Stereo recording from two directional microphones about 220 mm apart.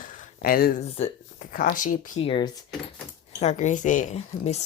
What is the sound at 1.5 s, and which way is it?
Speech, 40° left (ahead or behind).